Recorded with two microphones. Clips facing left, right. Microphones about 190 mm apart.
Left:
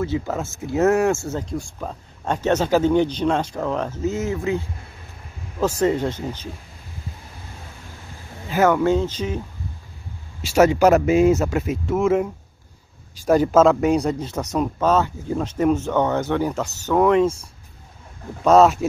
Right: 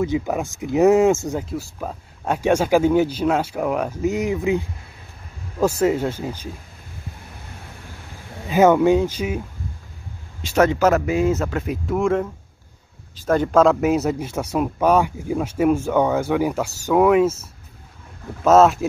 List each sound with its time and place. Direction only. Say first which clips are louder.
0.0 s speech: right 2 dB; 15° right (ahead or behind)
1.4 s speech: even; 5° right (ahead or behind)
8.5 s speech: right 3 dB; 20° right (ahead or behind)
10.4 s speech: left 2 dB; 10° left (ahead or behind)
11.6 s speech: left 1 dB; centre (ahead or behind)